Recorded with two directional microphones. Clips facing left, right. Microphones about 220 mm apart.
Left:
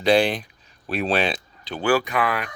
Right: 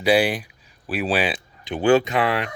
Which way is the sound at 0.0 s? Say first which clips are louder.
Even; 10° right (ahead or behind).